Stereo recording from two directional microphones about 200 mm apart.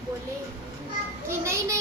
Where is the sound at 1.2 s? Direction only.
15° right (ahead or behind).